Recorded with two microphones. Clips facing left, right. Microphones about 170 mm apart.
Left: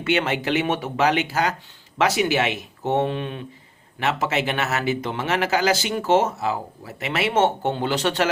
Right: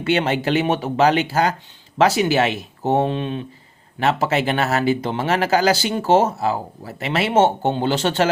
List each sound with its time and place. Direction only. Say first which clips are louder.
0.0 s speech: right 3 dB; 35° right (ahead or behind)